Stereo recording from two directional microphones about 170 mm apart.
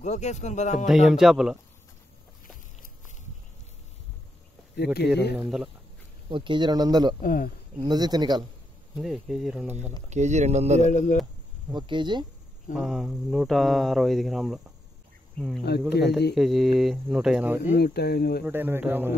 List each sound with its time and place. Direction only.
0.0 s speech: 40° left (ahead or behind)
1.0 s speech: centre (ahead or behind)
4.9 s speech: 75° left (ahead or behind)
5.4 s speech: centre (ahead or behind)
6.2 s speech: 30° right (ahead or behind)
7.2 s speech: 55° left (ahead or behind)
7.8 s speech: 25° right (ahead or behind)
8.9 s speech: 5° right (ahead or behind)
10.0 s speech: 45° right (ahead or behind)
10.9 s speech: 45° left (ahead or behind)
11.7 s speech: 25° right (ahead or behind)
12.7 s speech: centre (ahead or behind)
17.7 s speech: 70° left (ahead or behind)
18.4 s speech: 10° right (ahead or behind)